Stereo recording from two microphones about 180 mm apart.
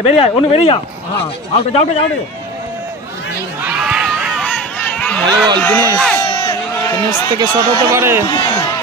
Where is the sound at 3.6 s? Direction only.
5° right (ahead or behind).